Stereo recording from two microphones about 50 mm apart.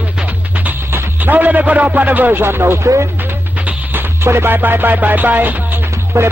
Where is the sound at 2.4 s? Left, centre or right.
Right.